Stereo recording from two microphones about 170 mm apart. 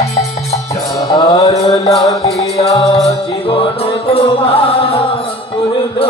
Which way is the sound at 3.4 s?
35° left (ahead or behind).